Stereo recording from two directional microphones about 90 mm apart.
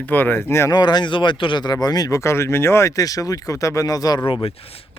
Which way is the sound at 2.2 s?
30° left (ahead or behind).